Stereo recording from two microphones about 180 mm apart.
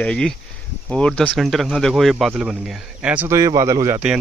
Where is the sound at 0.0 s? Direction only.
5° left (ahead or behind); by 4.0 s 15° right (ahead or behind).